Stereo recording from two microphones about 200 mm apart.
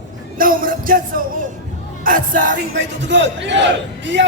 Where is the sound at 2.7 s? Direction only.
65° right (ahead or behind).